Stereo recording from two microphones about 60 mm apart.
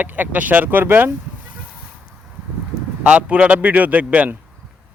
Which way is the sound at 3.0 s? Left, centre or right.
Right.